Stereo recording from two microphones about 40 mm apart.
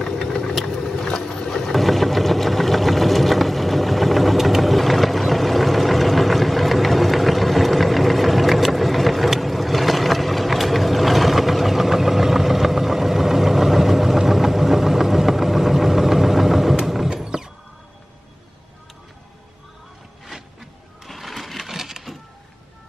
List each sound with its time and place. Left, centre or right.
0.2 s vehicle: centre
0.9 s boat: centre
1.7 s sewing machine: centre
16.8 s a sound: centre
17.1 s door: centre
21.1 s sewing machine: centre